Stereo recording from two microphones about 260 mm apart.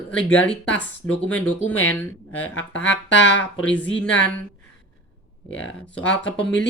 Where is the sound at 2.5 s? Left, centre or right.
Left.